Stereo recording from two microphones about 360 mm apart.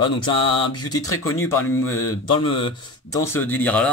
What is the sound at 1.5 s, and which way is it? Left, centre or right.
Speech, centre.